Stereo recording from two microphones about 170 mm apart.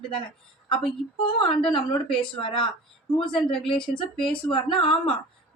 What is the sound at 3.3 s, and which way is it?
Speech, 5° left (ahead or behind).